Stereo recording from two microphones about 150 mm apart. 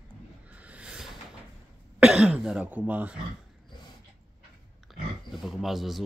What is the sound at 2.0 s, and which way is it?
Speech, 5° right (ahead or behind).